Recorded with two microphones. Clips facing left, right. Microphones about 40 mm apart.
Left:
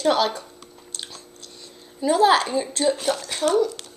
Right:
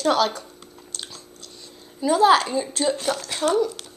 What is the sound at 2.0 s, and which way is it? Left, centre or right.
Speech, centre.